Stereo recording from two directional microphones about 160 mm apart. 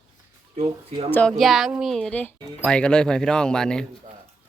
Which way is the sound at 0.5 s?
35° right (ahead or behind).